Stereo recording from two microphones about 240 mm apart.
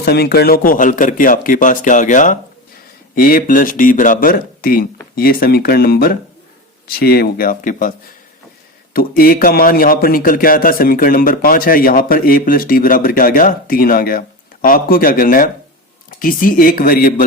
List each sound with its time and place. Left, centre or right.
0.0 s a man's voice: left